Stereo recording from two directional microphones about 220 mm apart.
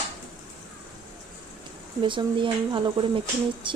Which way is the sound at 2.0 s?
20° right (ahead or behind).